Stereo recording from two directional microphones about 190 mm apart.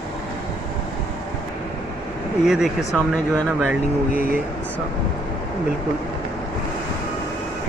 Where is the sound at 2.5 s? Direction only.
Centre (ahead or behind).